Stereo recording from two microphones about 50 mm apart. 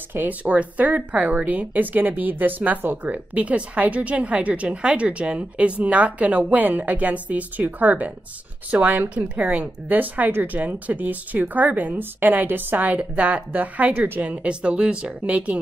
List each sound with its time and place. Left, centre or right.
0.1 s a woman's voice: right